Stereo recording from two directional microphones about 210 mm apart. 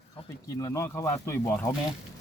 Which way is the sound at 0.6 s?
15° left (ahead or behind).